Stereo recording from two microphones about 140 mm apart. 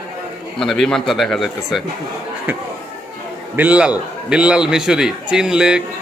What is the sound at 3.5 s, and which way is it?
Speech, 10° right (ahead or behind).